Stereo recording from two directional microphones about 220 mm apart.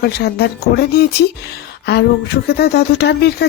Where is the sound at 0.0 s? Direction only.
45° left (ahead or behind).